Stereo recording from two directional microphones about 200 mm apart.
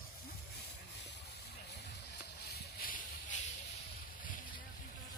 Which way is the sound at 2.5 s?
45° left (ahead or behind).